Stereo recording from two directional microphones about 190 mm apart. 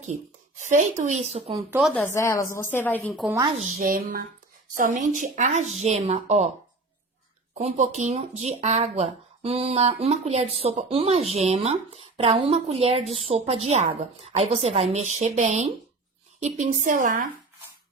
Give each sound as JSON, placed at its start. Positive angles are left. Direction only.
{"t": 0.6, "sound": "speech", "side_deg": -40}
{"t": 1.8, "sound": "speech", "side_deg": 10}
{"t": 3.6, "sound": "speech", "side_deg": -50}
{"t": 7.6, "sound": "speech", "side_deg": -35}